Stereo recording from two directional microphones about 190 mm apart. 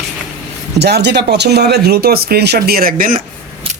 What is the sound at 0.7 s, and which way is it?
Speech, 60° right (ahead or behind).